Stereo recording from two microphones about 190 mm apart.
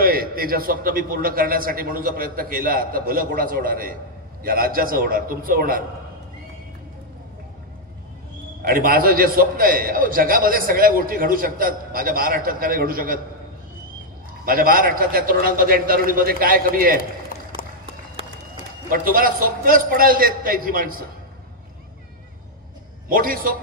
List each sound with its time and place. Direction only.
0.0 s a man's voice: 50° right (ahead or behind)
8.6 s a man's voice: 50° right (ahead or behind)
14.4 s a man's voice: 50° right (ahead or behind)
18.9 s a man's voice: 50° right (ahead or behind)
23.0 s a man's voice: 50° right (ahead or behind)